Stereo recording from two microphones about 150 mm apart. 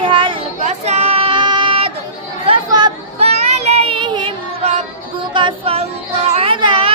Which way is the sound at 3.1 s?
45° right (ahead or behind).